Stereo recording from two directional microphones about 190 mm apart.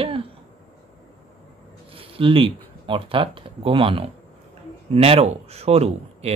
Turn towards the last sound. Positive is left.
turn(degrees=-35)  # may be behind; listen again after turning